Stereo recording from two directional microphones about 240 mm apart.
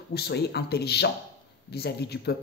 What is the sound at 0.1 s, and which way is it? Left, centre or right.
Speech, left.